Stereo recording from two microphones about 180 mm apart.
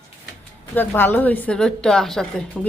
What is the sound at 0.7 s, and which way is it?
A woman's voice, 10° left (ahead or behind).